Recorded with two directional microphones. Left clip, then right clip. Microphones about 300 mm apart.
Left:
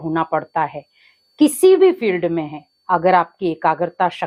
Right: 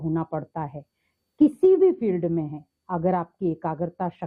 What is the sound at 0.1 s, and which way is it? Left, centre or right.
A woman's voice, centre.